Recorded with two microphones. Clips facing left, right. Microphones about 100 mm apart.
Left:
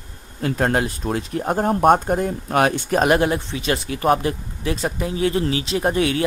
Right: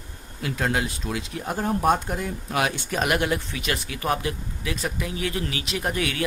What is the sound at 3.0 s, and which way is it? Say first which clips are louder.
Speech: left 5 dB; 30° left (ahead or behind).